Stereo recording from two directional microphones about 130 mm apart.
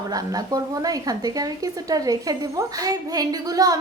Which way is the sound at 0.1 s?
30° right (ahead or behind).